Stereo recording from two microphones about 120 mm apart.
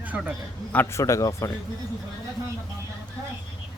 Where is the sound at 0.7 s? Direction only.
20° left (ahead or behind).